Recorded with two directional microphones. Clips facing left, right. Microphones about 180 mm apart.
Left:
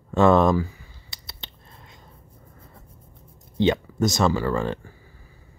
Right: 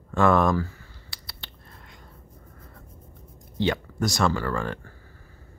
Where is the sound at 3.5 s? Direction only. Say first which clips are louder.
Left 5 dB; 20° left (ahead or behind).